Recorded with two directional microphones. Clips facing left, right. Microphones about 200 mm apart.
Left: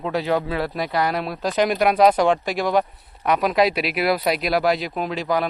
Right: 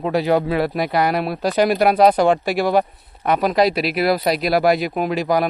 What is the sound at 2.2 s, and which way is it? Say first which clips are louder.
Speech: right 3 dB; 5° right (ahead or behind).